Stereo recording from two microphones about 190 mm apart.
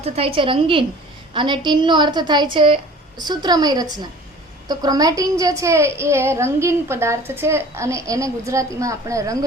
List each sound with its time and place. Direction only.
0.0 s a woman's voice: 30° right (ahead or behind)